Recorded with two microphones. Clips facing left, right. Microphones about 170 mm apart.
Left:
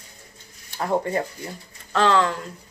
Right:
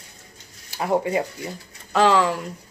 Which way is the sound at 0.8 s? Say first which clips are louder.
Right 2 dB; 10° right (ahead or behind).